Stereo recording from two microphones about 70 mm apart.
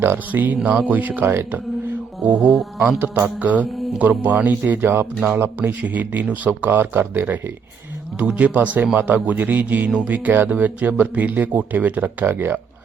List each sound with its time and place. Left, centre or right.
0.0 s speech: right
1.2 s speech: right
1.5 s mantra: right
3.0 s speech: right
5.5 s speech: right
8.2 s speech: centre